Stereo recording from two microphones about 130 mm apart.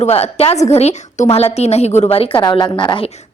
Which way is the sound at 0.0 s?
50° left (ahead or behind).